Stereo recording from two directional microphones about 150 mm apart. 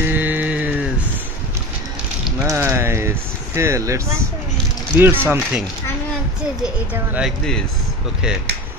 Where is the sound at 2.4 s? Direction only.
20° right (ahead or behind).